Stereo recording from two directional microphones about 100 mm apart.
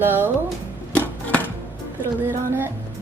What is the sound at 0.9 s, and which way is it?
Chopping, 15° left (ahead or behind).